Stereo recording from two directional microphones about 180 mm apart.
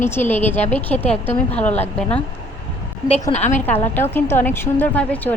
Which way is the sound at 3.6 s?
10° left (ahead or behind).